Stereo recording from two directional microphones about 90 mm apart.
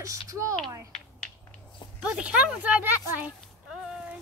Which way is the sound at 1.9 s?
15° right (ahead or behind).